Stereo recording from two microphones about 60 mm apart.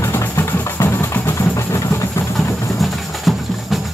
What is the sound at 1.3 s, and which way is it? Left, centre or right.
Vehicle, left.